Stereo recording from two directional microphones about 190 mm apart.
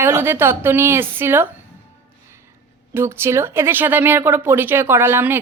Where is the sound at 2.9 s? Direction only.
10° right (ahead or behind).